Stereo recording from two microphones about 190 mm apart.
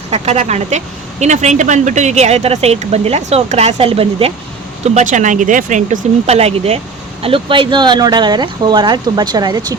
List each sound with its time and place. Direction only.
0.1 s speech: 35° right (ahead or behind)